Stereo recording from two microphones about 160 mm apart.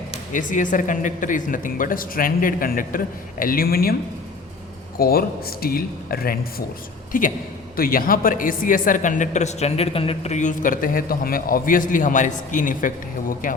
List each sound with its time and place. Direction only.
0.3 s speech: 55° left (ahead or behind); by 3.9 s 70° left (ahead or behind)
4.9 s speech: 70° left (ahead or behind)
7.1 s a woman's voice: 60° left (ahead or behind)